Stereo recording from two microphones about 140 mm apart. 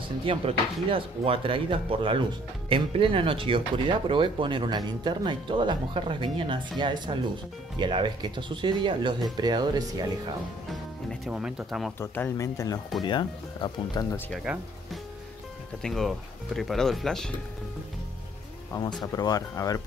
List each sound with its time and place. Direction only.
0.2 s speech: 40° right (ahead or behind)
10.7 s speech: 5° right (ahead or behind)
12.0 s speech: 20° left (ahead or behind)
14.4 s speech: 5° right (ahead or behind)
18.7 s speech: 30° left (ahead or behind)